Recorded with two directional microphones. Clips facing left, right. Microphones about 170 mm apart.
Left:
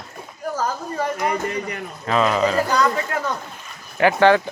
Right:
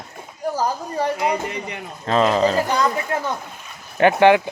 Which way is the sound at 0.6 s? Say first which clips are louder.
Right 1 dB; 15° right (ahead or behind).